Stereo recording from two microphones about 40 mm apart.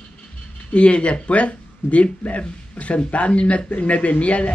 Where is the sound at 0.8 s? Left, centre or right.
Left.